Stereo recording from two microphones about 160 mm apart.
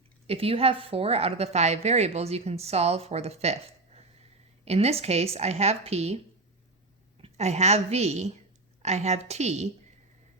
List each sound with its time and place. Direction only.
0.3 s a woman's voice: 35° right (ahead or behind)
7.2 s a woman's voice: 45° right (ahead or behind)